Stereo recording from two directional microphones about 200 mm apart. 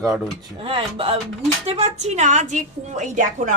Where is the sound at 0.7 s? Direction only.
30° right (ahead or behind).